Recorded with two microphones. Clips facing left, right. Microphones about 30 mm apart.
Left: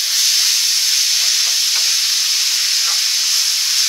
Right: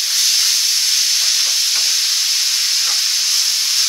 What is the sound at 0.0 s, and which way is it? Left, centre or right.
Steam, centre.